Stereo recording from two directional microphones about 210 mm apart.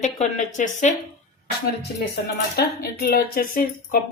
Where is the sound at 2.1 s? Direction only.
50° left (ahead or behind).